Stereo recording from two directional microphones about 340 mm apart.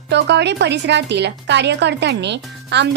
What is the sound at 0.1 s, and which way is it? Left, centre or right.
A woman's voice, right.